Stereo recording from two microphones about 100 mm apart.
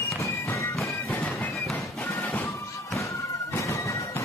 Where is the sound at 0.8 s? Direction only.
25° left (ahead or behind).